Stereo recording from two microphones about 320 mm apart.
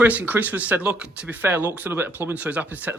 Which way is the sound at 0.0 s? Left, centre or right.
Centre.